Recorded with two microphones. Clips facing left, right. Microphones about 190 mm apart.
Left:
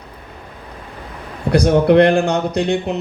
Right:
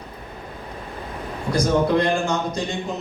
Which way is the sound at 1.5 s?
65° left (ahead or behind).